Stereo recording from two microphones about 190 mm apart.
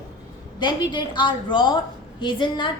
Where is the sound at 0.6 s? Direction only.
25° left (ahead or behind).